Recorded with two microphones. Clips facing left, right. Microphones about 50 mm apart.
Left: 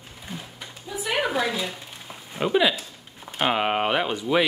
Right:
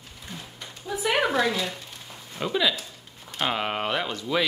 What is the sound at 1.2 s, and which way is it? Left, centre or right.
Speech, centre.